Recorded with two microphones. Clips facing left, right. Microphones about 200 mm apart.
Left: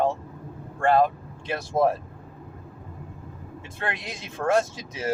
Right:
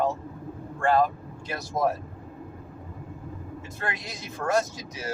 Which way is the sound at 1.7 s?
30° left (ahead or behind).